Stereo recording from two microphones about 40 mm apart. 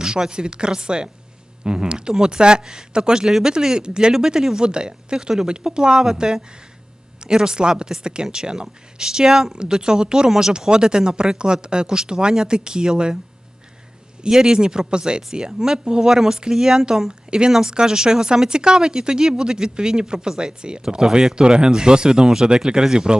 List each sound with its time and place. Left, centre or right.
0.0 s speech: centre
3.2 s speech: centre
14.2 s speech: centre